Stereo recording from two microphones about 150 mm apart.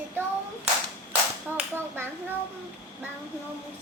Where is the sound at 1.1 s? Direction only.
10° right (ahead or behind).